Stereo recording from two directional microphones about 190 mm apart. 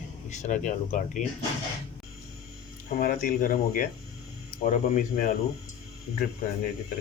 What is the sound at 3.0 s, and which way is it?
Speech, 45° left (ahead or behind).